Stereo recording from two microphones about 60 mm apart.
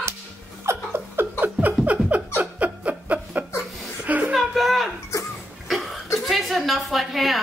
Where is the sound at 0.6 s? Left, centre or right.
Right.